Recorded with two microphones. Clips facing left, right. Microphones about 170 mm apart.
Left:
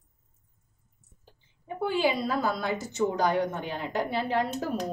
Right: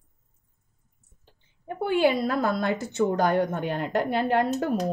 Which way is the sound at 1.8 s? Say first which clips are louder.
Right 4 dB; 60° right (ahead or behind).